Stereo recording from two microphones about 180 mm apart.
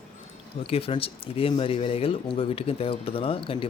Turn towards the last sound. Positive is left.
turn(degrees=30)  # may be behind; listen again after turning